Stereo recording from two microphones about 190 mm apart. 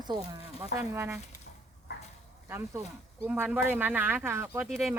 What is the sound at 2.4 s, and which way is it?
Speech, 15° right (ahead or behind).